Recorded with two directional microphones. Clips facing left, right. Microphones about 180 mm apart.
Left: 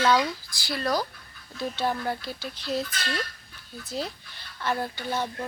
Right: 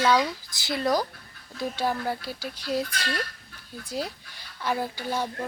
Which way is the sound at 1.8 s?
10° right (ahead or behind).